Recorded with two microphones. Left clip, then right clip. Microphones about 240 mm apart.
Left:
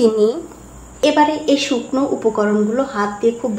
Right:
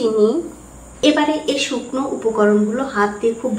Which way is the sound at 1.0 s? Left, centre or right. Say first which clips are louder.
Left 2 dB; left.